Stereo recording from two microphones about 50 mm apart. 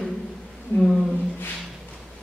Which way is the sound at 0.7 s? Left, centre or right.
Left.